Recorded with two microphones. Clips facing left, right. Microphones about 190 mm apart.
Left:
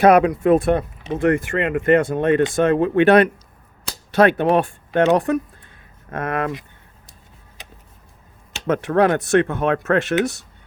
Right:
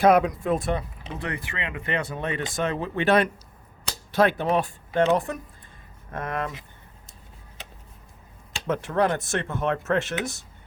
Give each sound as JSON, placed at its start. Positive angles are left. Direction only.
{"t": 0.0, "sound": "speech", "side_deg": 70}
{"t": 4.1, "sound": "speech", "side_deg": 70}
{"t": 8.6, "sound": "speech", "side_deg": 80}